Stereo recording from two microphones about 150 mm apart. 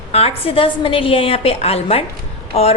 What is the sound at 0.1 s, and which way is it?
A woman's voice, 40° left (ahead or behind).